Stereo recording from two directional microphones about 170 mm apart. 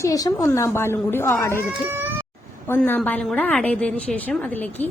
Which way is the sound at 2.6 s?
10° left (ahead or behind).